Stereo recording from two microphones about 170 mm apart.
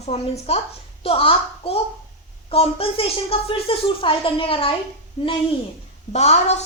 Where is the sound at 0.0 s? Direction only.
40° left (ahead or behind).